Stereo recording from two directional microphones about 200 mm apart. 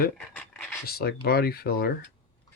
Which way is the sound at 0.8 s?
50° left (ahead or behind).